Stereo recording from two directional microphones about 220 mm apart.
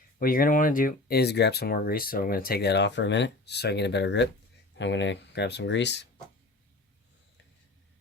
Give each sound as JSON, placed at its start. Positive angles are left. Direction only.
{"t": 0.2, "sound": "speech", "side_deg": 40}